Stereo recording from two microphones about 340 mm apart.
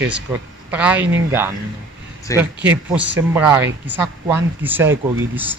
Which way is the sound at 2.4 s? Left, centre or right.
Centre.